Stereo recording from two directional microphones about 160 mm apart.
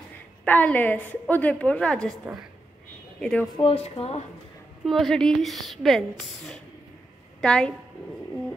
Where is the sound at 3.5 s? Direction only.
35° left (ahead or behind).